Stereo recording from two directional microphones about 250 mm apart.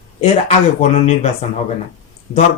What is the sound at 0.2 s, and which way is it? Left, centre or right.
Speech, left.